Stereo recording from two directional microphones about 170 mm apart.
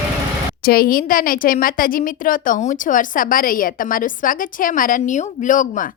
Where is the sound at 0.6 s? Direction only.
60° left (ahead or behind).